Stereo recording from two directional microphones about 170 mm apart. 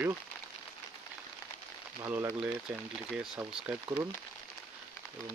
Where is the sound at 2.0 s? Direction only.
10° right (ahead or behind).